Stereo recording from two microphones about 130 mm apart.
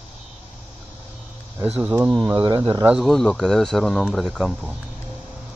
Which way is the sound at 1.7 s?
10° right (ahead or behind).